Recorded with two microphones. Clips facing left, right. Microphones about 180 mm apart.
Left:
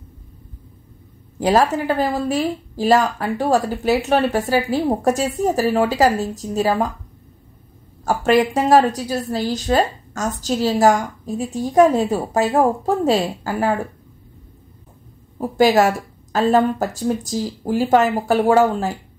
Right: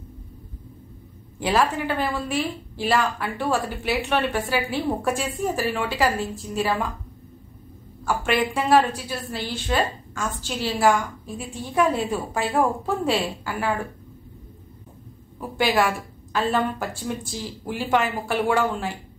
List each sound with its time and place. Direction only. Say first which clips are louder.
1.4 s speech: left 5 dB; 40° left (ahead or behind)
8.0 s speech: left 7 dB; 40° left (ahead or behind)
15.3 s speech: left 7 dB; 40° left (ahead or behind)